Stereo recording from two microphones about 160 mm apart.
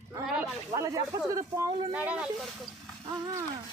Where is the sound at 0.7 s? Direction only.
20° right (ahead or behind).